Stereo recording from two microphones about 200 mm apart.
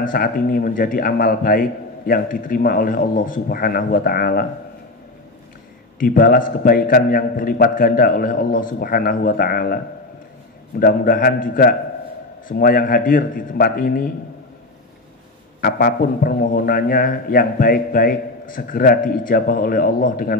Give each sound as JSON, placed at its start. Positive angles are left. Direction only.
{"t": 0.0, "sound": "a man's voice", "side_deg": 45}
{"t": 5.9, "sound": "a man's voice", "side_deg": 45}
{"t": 10.8, "sound": "a man's voice", "side_deg": 45}
{"t": 15.6, "sound": "a man's voice", "side_deg": 45}